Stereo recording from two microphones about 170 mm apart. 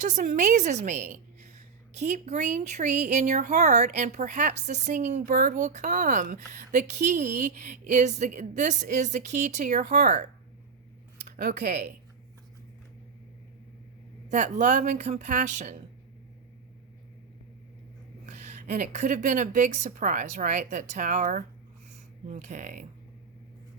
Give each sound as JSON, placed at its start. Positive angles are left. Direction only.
{"t": 0.0, "sound": "a woman's voice", "side_deg": -45}
{"t": 11.3, "sound": "speech", "side_deg": -65}
{"t": 14.3, "sound": "a woman's voice", "side_deg": -45}
{"t": 18.3, "sound": "a sound", "side_deg": -45}
{"t": 18.8, "sound": "a woman's voice", "side_deg": -45}